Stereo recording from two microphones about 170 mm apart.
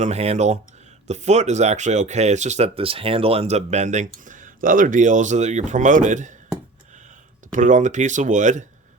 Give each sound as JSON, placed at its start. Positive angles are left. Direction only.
{"t": 0.0, "sound": "speech", "side_deg": -40}
{"t": 7.5, "sound": "speech", "side_deg": -45}